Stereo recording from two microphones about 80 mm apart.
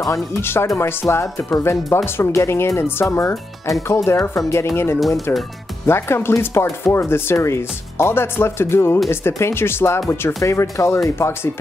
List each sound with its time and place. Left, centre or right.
0.1 s speech: left